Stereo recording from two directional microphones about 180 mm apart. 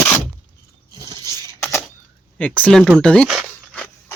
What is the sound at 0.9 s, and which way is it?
Rodents, 20° right (ahead or behind).